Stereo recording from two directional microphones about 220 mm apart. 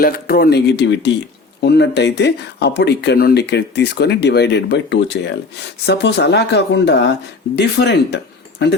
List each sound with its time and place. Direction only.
0.0 s speech: 45° left (ahead or behind)